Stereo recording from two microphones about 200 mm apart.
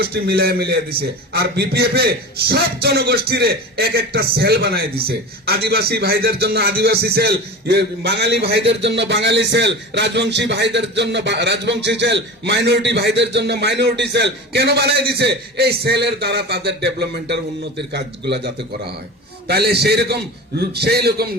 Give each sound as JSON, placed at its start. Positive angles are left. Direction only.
{"t": 0.0, "sound": "a man's voice", "side_deg": -50}